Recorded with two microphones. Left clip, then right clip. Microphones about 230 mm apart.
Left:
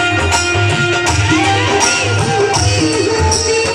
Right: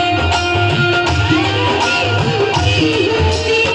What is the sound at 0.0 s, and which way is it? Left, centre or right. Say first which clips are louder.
Music: left 1 dB; centre.